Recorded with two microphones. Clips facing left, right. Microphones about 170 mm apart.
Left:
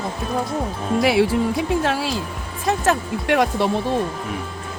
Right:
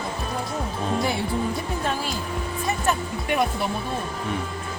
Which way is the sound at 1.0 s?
90° left.